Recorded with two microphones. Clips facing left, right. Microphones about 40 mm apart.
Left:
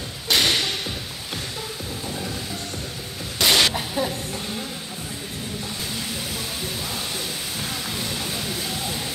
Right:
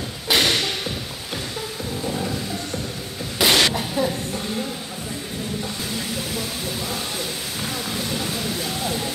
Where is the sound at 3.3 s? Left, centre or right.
Centre.